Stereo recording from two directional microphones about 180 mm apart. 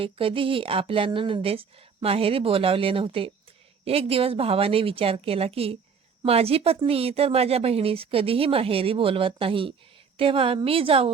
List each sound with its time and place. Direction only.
0.0 s speech: 30° right (ahead or behind)